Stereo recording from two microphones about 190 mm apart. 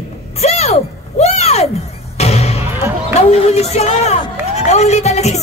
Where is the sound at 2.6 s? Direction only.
10° right (ahead or behind).